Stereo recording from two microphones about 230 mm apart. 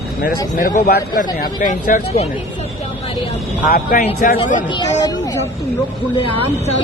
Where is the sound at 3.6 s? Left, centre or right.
Left.